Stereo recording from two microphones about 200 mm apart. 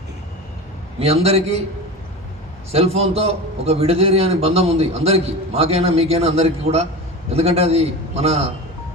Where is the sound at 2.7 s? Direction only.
30° right (ahead or behind).